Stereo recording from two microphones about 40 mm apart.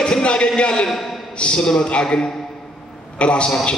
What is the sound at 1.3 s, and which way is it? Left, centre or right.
Speech, left.